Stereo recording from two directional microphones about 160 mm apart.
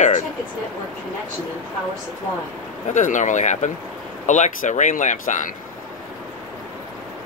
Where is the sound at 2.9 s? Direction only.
50° left (ahead or behind).